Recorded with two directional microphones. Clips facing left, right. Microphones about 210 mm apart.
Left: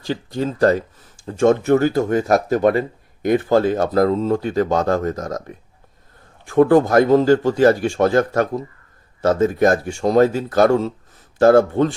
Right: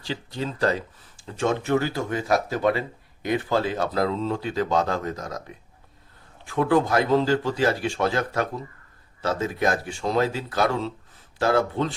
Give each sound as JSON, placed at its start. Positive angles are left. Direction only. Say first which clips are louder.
{"t": 0.0, "sound": "speech", "louder": "left 7 dB", "side_deg": 45}
{"t": 6.4, "sound": "speech", "louder": "left 8 dB", "side_deg": 45}